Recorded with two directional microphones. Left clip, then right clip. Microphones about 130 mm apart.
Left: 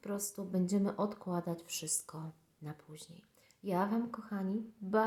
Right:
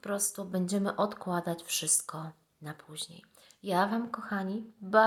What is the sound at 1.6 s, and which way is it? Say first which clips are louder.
Speech: right 9 dB; 45° left (ahead or behind).